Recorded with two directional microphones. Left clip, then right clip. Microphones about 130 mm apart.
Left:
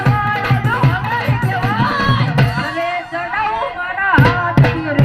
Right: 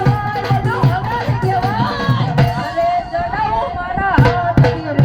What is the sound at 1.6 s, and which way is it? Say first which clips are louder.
Music: left 2 dB; 15° right (ahead or behind).